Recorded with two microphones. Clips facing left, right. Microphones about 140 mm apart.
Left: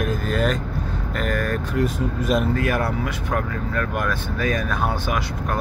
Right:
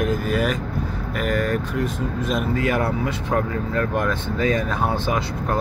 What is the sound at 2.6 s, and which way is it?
Speech, 20° right (ahead or behind).